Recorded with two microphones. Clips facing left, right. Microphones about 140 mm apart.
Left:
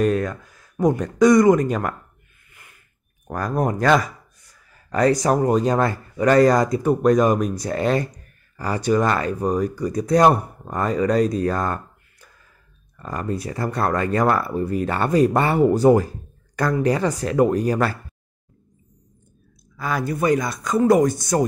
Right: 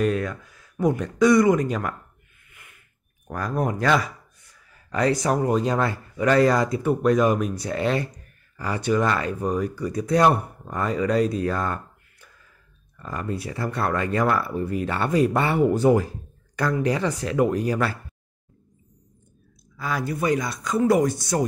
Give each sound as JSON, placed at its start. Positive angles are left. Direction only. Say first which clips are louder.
{"t": 0.0, "sound": "speech", "louder": "left 3 dB", "side_deg": 40}
{"t": 2.5, "sound": "a sound", "louder": "left 1 dB", "side_deg": 35}
{"t": 3.3, "sound": "speech", "louder": "left 3 dB", "side_deg": 45}
{"t": 19.8, "sound": "speech", "louder": "left 3 dB", "side_deg": 50}